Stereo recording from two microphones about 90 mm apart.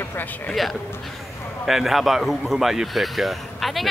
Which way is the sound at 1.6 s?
Centre (ahead or behind).